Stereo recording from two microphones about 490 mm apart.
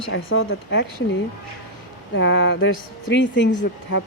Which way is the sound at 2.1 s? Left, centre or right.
Left.